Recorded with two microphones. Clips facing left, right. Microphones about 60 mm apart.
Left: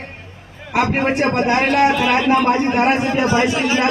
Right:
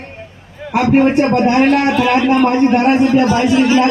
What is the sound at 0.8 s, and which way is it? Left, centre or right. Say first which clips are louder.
Speech: right 6 dB; left.